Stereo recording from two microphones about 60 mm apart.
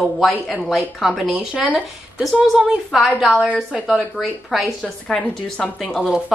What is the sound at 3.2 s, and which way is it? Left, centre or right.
Speech, centre.